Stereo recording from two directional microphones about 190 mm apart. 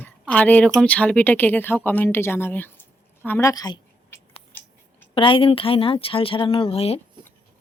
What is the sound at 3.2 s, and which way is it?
Scissors, 15° left (ahead or behind).